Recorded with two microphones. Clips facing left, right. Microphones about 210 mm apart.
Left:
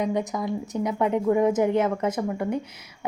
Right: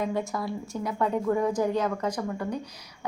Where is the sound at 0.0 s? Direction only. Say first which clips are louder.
Left 3 dB; 20° left (ahead or behind).